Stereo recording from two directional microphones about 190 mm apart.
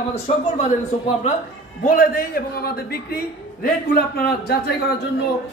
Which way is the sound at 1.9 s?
50° left (ahead or behind).